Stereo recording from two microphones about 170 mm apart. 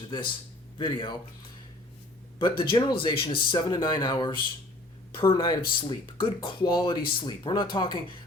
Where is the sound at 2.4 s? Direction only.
25° left (ahead or behind).